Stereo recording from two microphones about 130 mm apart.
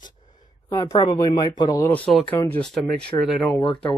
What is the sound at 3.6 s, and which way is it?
Speech, 40° left (ahead or behind).